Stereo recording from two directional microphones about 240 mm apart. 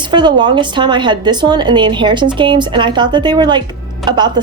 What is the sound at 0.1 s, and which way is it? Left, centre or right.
A woman's voice, centre.